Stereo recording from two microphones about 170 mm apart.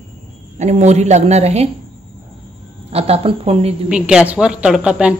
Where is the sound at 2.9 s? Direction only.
35° right (ahead or behind).